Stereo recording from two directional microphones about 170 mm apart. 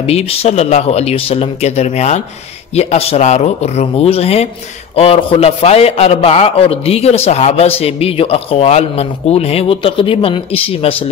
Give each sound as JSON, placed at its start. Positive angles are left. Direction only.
{"t": 0.0, "sound": "a man's voice", "side_deg": 35}